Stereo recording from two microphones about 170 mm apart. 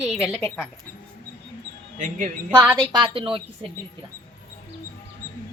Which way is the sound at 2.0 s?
50° right (ahead or behind).